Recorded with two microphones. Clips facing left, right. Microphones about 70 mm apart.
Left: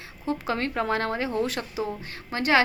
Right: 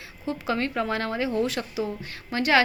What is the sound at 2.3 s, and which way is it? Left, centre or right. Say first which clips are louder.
Speech: right 1 dB; left.